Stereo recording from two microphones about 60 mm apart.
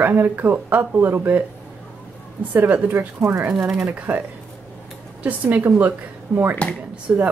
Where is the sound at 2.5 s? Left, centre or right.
Right.